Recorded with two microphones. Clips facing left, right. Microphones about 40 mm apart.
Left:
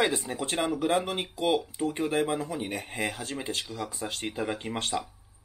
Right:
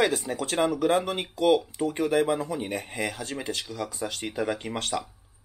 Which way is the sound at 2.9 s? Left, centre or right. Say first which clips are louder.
Right 1 dB; left.